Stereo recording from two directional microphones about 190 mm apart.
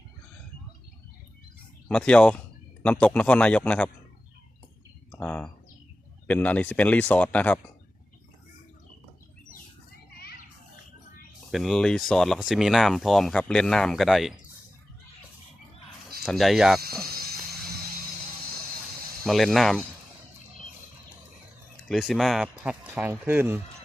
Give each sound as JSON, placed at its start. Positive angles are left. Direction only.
{"t": 1.9, "sound": "speech", "side_deg": 5}
{"t": 5.1, "sound": "speech", "side_deg": 5}
{"t": 10.2, "sound": "children playing", "side_deg": 55}
{"t": 11.5, "sound": "speech", "side_deg": 0}
{"t": 16.2, "sound": "speech", "side_deg": 0}
{"t": 17.0, "sound": "cricket", "side_deg": -55}
{"t": 19.2, "sound": "speech", "side_deg": 0}
{"t": 21.8, "sound": "speech", "side_deg": 0}